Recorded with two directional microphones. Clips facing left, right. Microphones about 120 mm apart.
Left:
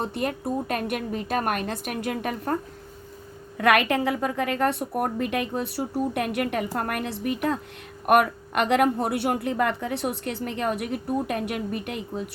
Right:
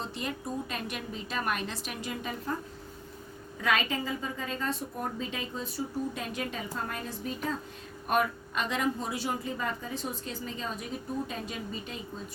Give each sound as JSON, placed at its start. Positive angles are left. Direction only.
{"t": 0.0, "sound": "a woman's voice", "side_deg": 55}
{"t": 3.6, "sound": "speech", "side_deg": 70}